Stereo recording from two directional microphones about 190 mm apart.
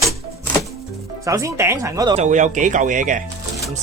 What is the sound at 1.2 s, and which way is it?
Speech, 15° right (ahead or behind).